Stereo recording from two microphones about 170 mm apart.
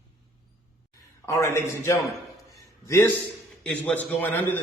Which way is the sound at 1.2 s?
15° left (ahead or behind).